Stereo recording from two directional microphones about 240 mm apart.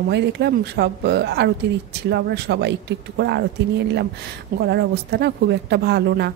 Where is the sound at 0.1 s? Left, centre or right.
Right.